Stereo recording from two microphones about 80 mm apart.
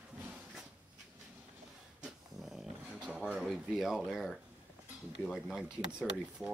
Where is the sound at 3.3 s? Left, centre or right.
Centre.